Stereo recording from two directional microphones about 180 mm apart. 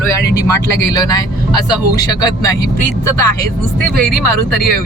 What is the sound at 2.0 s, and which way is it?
Speech, 20° left (ahead or behind).